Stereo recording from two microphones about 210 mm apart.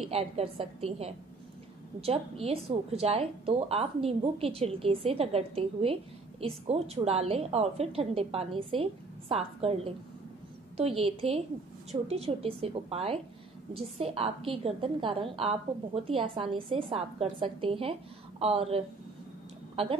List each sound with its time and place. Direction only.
0.1 s a woman's voice: 30° right (ahead or behind)